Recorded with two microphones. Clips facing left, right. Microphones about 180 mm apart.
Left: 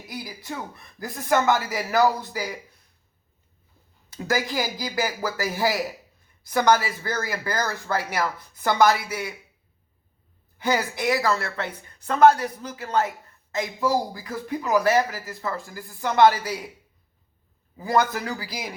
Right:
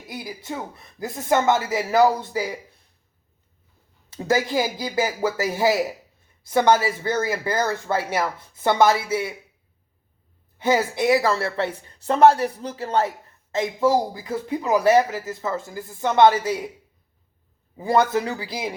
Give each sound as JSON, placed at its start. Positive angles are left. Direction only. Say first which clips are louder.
{"t": 0.1, "sound": "a woman's voice", "louder": "right 3 dB", "side_deg": -25}
{"t": 4.1, "sound": "a woman's voice", "louder": "right 4 dB", "side_deg": -25}
{"t": 10.6, "sound": "a woman's voice", "louder": "right 4 dB", "side_deg": -25}
{"t": 17.7, "sound": "a woman's voice", "louder": "right 3 dB", "side_deg": -25}